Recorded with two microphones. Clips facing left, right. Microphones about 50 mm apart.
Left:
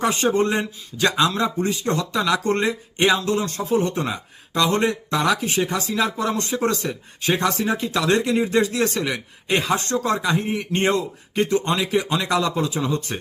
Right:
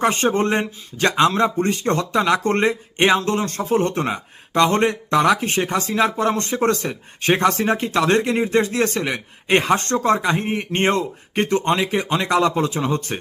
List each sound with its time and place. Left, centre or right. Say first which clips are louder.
0.0 s speech: right 1 dB; right